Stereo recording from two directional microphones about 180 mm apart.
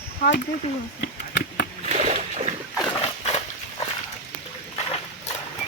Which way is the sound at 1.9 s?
40° right (ahead or behind).